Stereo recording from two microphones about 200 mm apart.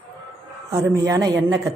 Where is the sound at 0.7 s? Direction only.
15° right (ahead or behind).